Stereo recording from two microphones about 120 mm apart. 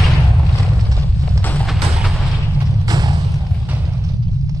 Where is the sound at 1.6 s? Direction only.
Centre (ahead or behind).